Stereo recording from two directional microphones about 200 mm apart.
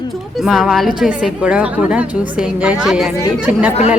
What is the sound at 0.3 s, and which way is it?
A woman's voice, centre (ahead or behind).